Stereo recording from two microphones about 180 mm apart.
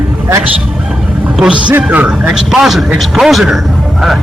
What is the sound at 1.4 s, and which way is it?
A man's voice, 5° right (ahead or behind).